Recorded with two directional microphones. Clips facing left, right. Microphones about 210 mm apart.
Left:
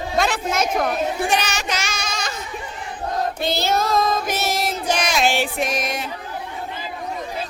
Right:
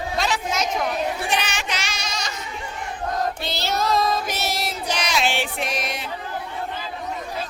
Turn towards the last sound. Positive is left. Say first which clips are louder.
# left 4 dB
turn(degrees=45)  # may be behind; listen again after turning